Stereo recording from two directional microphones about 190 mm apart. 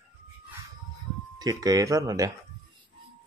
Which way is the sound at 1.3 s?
20° right (ahead or behind).